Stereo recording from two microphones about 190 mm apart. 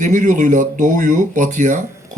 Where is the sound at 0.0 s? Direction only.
40° right (ahead or behind).